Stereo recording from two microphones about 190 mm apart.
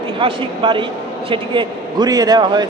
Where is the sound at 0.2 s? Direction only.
25° right (ahead or behind).